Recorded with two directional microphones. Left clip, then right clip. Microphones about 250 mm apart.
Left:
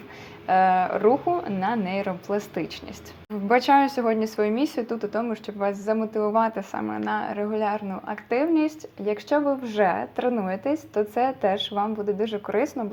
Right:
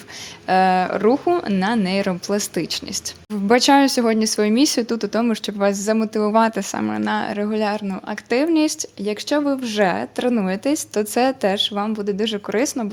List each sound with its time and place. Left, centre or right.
0.4 s speech: right
3.5 s speech: right
6.3 s speech: right
6.7 s speech: right